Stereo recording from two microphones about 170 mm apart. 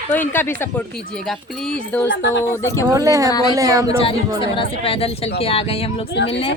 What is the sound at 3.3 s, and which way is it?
Speech, 25° left (ahead or behind).